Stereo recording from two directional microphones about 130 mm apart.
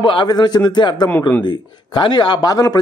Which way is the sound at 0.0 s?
40° left (ahead or behind).